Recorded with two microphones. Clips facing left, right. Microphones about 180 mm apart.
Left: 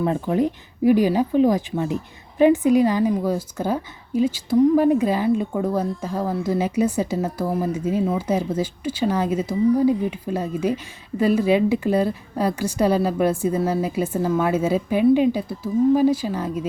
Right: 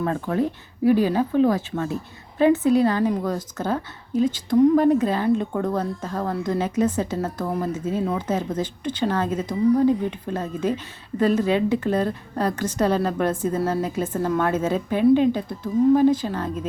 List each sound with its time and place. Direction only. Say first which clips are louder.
0.0 s speech: left 3 dB; 15° left (ahead or behind)